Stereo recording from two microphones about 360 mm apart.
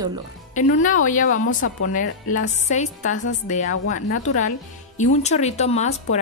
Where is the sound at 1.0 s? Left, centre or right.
Left.